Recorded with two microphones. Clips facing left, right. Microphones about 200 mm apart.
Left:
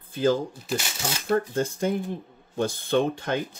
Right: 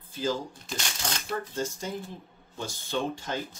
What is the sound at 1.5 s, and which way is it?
Speech, 55° left (ahead or behind).